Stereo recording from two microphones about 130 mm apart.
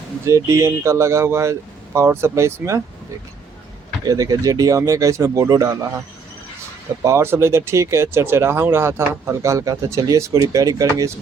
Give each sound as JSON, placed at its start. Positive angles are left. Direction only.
{"t": 0.3, "sound": "speech", "side_deg": -25}
{"t": 4.0, "sound": "speech", "side_deg": -30}
{"t": 7.0, "sound": "speech", "side_deg": -20}